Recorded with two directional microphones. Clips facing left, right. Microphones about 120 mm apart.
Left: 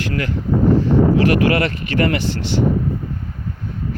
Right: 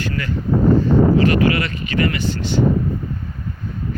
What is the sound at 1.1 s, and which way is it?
Speech, 65° left (ahead or behind).